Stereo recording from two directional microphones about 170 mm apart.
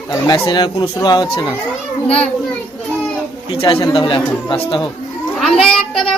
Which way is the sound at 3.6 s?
30° left (ahead or behind).